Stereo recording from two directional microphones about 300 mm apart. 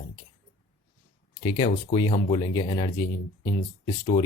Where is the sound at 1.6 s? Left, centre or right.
Left.